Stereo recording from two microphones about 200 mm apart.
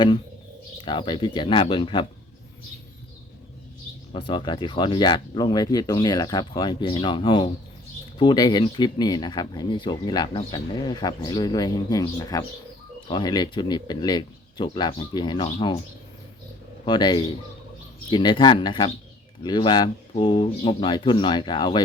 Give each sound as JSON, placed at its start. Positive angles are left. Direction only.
{"t": 0.9, "sound": "speech", "side_deg": 20}
{"t": 4.1, "sound": "speech", "side_deg": 25}
{"t": 16.8, "sound": "speech", "side_deg": 20}